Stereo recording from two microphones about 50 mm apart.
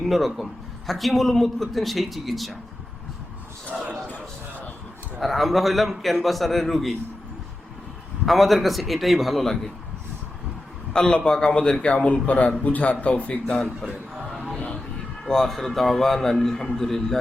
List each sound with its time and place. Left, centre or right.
0.0 s a man's voice: centre
5.2 s a man's voice: centre
8.3 s a man's voice: centre
10.9 s a man's voice: centre
13.7 s a sound: centre
15.2 s a man's voice: centre